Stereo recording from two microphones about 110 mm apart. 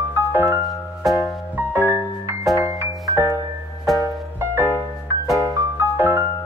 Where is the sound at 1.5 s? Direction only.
20° right (ahead or behind).